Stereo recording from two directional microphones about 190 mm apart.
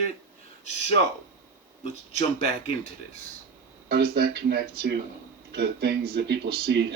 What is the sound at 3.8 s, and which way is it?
Speech, 55° right (ahead or behind).